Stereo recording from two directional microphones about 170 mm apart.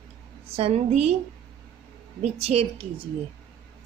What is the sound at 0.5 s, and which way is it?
Speech, 35° right (ahead or behind).